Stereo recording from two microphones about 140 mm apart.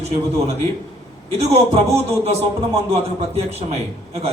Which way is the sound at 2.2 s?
50° right (ahead or behind).